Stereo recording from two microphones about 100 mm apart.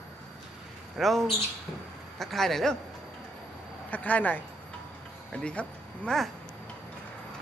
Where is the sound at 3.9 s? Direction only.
15° left (ahead or behind).